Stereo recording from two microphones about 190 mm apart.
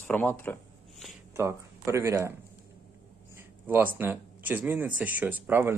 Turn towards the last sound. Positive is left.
turn(degrees=-10)  # may be behind; listen again after turning